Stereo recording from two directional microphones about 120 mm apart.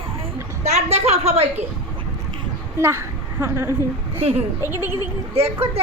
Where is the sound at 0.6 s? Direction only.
60° right (ahead or behind).